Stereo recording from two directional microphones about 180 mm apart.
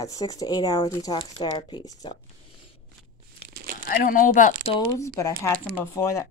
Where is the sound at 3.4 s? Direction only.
55° right (ahead or behind).